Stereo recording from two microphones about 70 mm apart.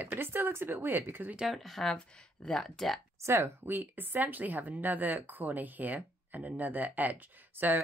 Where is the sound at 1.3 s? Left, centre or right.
Centre.